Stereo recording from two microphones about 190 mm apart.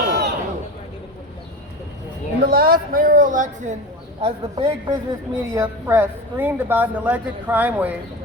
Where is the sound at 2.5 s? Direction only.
50° right (ahead or behind).